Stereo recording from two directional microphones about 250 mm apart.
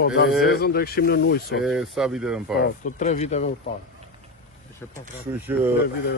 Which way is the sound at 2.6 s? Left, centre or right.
Left.